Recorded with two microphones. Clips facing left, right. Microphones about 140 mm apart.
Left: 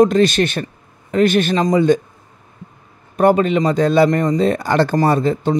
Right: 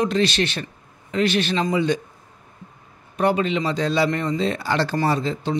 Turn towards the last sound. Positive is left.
turn(degrees=50)  # may be behind; listen again after turning